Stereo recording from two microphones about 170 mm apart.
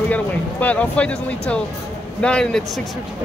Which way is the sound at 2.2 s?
5° left (ahead or behind).